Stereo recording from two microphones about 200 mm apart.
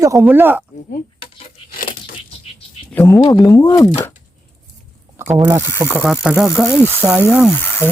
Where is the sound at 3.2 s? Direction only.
20° left (ahead or behind).